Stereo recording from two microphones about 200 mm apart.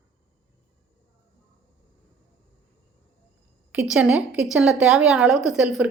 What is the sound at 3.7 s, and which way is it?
A woman's voice, 5° right (ahead or behind).